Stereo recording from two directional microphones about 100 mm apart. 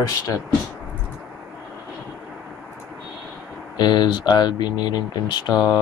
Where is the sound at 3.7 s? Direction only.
45° left (ahead or behind).